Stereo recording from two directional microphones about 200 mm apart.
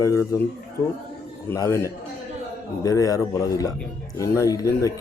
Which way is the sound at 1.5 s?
15° left (ahead or behind).